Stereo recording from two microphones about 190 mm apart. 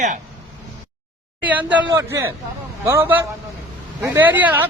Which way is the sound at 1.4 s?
10° right (ahead or behind).